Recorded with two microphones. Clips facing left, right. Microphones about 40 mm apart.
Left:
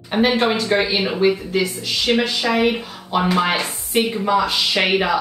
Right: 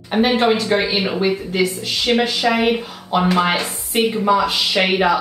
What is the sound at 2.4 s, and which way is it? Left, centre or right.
Speech, centre.